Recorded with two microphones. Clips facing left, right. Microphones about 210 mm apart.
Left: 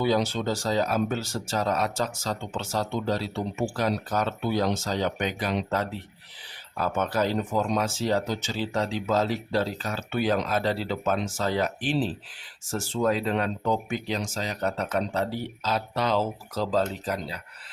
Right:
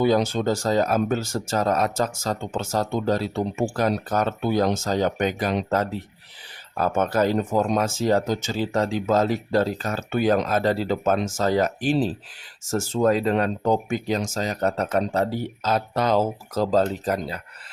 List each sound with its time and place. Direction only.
0.0 s speech: 50° right (ahead or behind)